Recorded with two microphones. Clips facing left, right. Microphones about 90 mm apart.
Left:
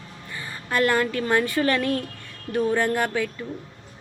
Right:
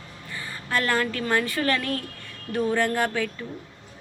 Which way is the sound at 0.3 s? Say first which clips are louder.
Left 3 dB; 15° left (ahead or behind).